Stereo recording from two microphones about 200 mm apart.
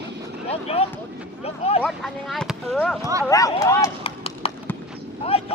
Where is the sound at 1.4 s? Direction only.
30° left (ahead or behind).